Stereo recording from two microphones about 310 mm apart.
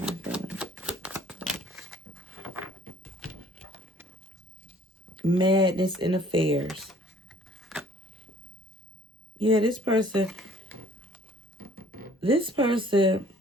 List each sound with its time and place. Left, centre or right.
0.0 s typewriter: centre
3.0 s a sound: centre
5.3 s speech: centre
6.6 s a sound: centre
9.4 s speech: centre
11.5 s music: right
12.2 s speech: centre